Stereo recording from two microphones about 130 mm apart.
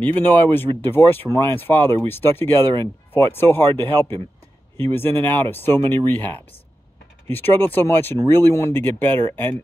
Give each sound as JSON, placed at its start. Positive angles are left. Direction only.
{"t": 0.0, "sound": "speech", "side_deg": 15}